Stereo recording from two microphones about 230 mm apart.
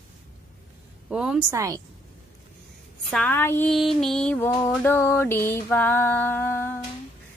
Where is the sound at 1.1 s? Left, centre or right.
Centre.